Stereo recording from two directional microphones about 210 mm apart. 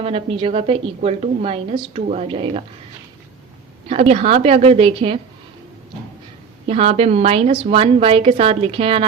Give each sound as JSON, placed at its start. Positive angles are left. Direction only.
{"t": 0.0, "sound": "a woman's voice", "side_deg": -30}
{"t": 3.8, "sound": "a woman's voice", "side_deg": -30}
{"t": 6.7, "sound": "a woman's voice", "side_deg": -30}